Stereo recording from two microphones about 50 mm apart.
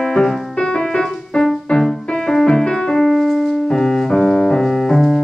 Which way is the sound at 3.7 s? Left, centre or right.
Centre.